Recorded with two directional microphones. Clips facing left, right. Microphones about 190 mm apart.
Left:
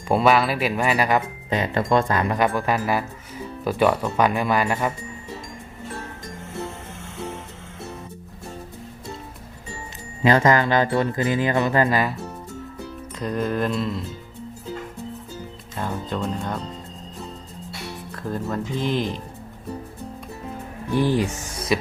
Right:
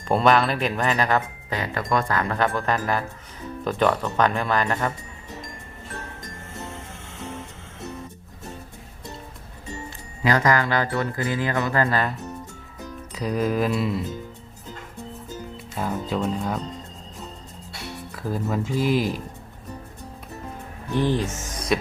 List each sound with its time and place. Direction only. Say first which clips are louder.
0.1 s speech: left 1 dB; 5° left (ahead or behind)
1.5 s speech: left 4 dB; 20° left (ahead or behind)
10.2 s speech: left 3 dB; 25° left (ahead or behind)
13.1 s speech: right 1 dB; 5° right (ahead or behind)
15.7 s speech: right 1 dB; 5° right (ahead or behind)
18.1 s speech: right 1 dB; 5° right (ahead or behind)
20.9 s speech: left 2 dB; 10° left (ahead or behind)